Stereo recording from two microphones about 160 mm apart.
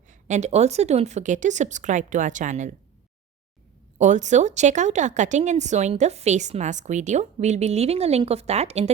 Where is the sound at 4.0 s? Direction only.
50° right (ahead or behind).